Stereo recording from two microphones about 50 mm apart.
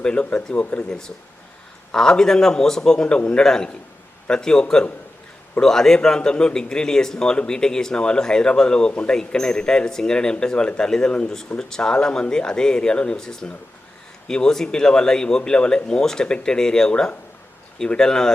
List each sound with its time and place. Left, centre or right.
0.0 s speech: left
1.9 s a man's voice: centre
8.9 s speech: left
9.1 s a man's voice: centre